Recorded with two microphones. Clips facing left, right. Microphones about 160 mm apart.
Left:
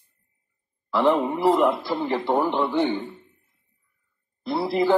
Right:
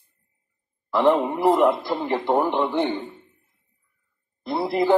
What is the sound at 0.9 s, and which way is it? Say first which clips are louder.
A man's voice: right 1 dB; 15° right (ahead or behind).